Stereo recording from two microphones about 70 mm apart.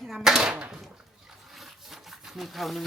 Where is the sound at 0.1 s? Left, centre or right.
Centre.